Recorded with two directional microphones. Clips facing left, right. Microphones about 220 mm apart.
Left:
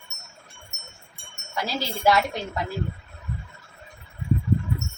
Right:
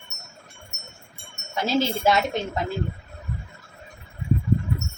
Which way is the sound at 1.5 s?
25° right (ahead or behind).